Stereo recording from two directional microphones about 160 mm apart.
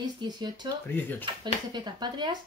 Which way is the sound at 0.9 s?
10° left (ahead or behind).